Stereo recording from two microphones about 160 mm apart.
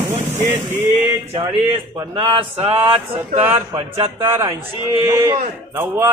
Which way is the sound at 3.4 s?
15° right (ahead or behind).